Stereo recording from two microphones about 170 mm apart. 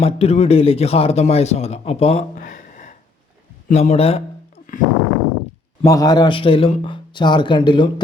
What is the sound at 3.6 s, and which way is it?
A man's voice, 45° left (ahead or behind).